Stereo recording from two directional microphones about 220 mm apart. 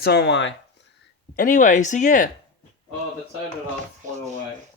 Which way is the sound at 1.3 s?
40° left (ahead or behind).